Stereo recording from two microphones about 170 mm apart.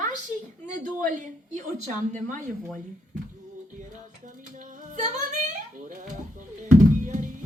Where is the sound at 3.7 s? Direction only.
50° right (ahead or behind).